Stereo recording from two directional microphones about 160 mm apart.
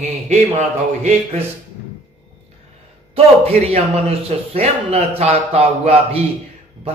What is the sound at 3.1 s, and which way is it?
A man's voice, 40° right (ahead or behind).